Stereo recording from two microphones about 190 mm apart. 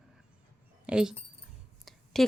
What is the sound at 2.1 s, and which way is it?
Speech, centre (ahead or behind).